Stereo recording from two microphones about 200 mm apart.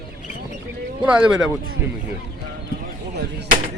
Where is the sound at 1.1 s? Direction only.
5° right (ahead or behind).